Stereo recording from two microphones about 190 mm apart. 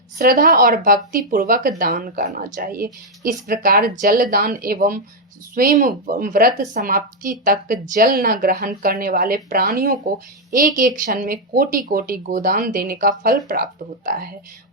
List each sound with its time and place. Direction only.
0.2 s speech: 50° right (ahead or behind)